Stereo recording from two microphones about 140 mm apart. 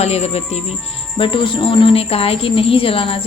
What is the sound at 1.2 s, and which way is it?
A woman's voice, 35° left (ahead or behind).